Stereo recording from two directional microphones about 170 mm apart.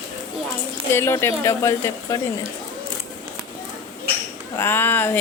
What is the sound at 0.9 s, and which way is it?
Music, 15° left (ahead or behind).